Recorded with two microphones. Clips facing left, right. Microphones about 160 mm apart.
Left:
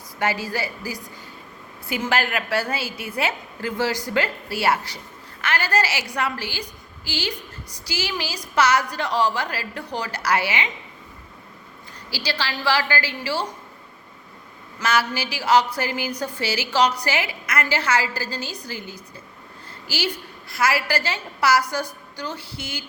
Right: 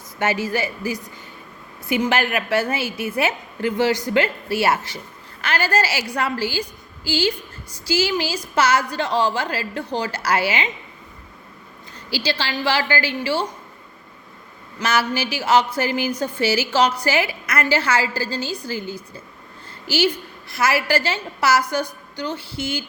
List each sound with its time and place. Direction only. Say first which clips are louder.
0.2 s a woman's voice: right 3 dB; 25° right (ahead or behind)
12.1 s a woman's voice: right 4 dB; 25° right (ahead or behind)
14.8 s a woman's voice: right 2 dB; 25° right (ahead or behind)